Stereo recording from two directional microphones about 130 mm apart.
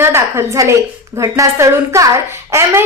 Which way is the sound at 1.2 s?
25° right (ahead or behind).